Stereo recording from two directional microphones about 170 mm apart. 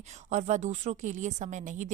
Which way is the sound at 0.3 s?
40° right (ahead or behind).